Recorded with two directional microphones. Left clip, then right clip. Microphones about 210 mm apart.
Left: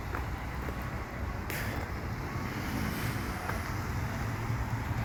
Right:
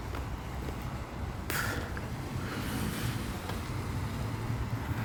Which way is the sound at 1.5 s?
30° right (ahead or behind).